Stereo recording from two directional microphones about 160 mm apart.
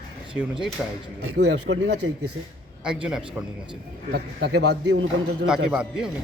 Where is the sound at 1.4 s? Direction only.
90° right.